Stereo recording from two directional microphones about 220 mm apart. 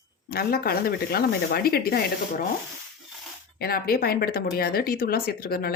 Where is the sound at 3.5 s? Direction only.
45° left (ahead or behind).